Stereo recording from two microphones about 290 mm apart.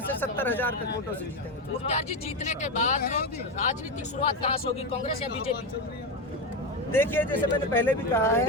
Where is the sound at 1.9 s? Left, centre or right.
Left.